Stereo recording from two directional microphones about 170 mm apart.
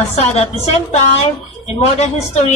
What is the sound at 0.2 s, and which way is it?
A woman's voice, 40° left (ahead or behind).